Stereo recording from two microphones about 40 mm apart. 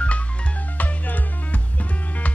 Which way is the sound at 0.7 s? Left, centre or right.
Left.